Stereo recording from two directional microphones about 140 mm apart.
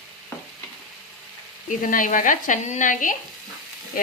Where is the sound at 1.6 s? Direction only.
75° left (ahead or behind).